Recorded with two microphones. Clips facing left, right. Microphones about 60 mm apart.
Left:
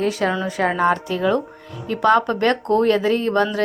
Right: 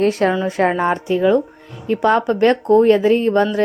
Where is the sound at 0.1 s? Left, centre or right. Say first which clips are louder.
Right 4 dB; right.